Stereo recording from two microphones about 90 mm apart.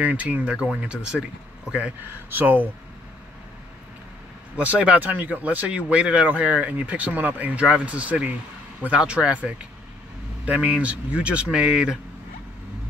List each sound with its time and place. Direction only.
0.0 s speech: 15° right (ahead or behind)
2.3 s speech: 20° right (ahead or behind)
4.6 s speech: 15° right (ahead or behind)